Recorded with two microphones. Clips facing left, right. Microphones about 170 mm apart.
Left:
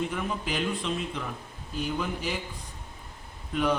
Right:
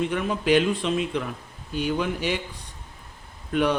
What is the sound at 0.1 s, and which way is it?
Speech, 80° right.